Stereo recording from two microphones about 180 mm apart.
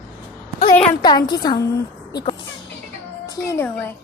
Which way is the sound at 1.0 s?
25° left (ahead or behind).